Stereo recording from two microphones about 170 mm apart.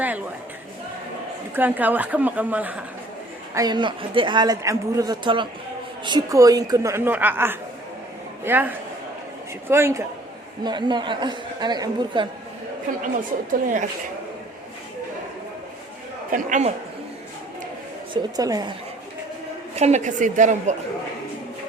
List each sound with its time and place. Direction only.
1.5 s a woman's voice: 10° right (ahead or behind)
3.5 s a man's voice: 25° right (ahead or behind)
10.6 s a man's voice: 25° right (ahead or behind)
12.9 s a woman's voice: 45° right (ahead or behind)
16.3 s a woman's voice: 45° right (ahead or behind)
18.1 s a man's voice: 20° right (ahead or behind)
19.7 s a woman's voice: 40° right (ahead or behind)